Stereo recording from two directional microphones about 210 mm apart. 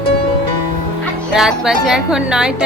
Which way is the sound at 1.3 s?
Centre (ahead or behind).